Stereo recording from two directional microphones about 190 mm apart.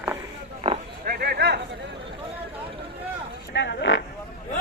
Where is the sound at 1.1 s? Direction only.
55° right (ahead or behind).